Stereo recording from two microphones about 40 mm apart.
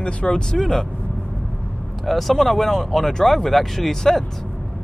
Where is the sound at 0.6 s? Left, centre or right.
Centre.